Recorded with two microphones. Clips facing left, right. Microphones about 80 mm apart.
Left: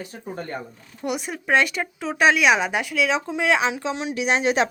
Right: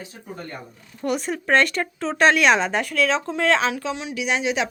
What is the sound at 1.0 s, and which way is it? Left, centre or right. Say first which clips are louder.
Speech: right 3 dB; centre.